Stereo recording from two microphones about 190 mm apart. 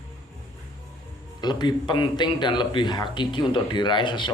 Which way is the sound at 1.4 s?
20° left (ahead or behind).